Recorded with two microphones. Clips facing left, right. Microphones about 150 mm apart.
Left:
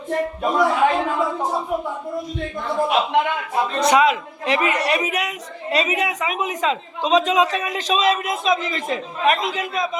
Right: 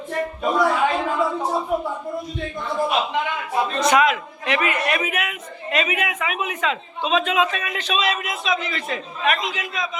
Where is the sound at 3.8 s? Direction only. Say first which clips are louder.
Left 2 dB; 30° left (ahead or behind); by 9.7 s 50° left (ahead or behind).